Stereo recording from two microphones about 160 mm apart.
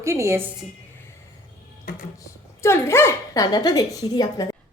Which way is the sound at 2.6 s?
15° left (ahead or behind).